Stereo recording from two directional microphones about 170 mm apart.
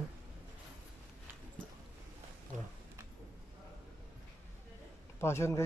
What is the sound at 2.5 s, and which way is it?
Speech, 45° right (ahead or behind).